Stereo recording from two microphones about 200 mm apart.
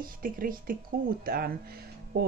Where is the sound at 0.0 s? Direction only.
45° right (ahead or behind).